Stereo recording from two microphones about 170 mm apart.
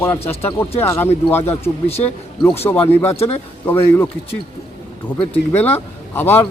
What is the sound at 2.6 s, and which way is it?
A man's voice, 10° left (ahead or behind).